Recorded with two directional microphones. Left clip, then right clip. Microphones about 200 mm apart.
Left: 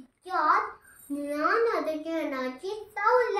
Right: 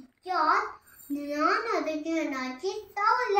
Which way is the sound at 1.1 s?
15° left (ahead or behind).